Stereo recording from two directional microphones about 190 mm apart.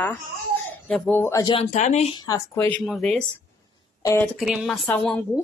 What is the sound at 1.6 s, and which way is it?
Speech, 40° left (ahead or behind).